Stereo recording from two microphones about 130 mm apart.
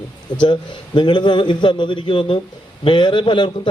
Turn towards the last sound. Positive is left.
turn(degrees=35)  # may be behind; listen again after turning